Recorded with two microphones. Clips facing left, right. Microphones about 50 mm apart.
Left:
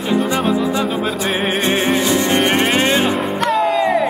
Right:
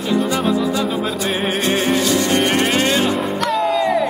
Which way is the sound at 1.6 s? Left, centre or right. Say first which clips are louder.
Even; left.